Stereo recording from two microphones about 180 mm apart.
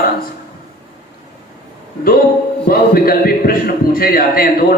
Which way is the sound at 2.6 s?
55° left (ahead or behind).